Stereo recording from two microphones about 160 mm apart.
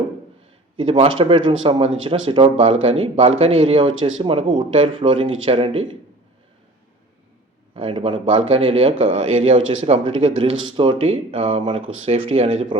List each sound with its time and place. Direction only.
0.8 s speech: 35° right (ahead or behind)
7.7 s speech: 35° right (ahead or behind)